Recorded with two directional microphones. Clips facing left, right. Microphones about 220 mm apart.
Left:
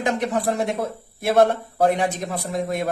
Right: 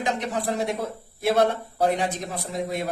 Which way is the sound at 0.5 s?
50° left (ahead or behind).